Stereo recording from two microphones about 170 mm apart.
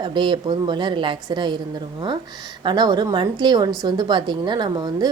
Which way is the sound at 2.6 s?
25° right (ahead or behind).